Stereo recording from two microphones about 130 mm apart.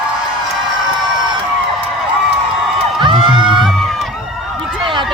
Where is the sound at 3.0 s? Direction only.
40° right (ahead or behind).